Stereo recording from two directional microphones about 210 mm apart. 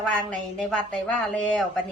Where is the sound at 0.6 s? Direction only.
5° left (ahead or behind).